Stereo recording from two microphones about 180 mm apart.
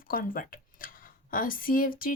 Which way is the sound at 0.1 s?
50° left (ahead or behind).